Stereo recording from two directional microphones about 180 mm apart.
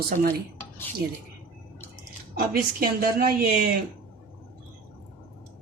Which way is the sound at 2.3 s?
60° right (ahead or behind).